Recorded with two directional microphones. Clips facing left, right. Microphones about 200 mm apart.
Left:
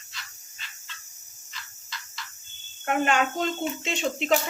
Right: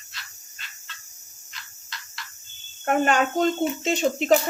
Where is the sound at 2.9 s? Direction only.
40° right (ahead or behind).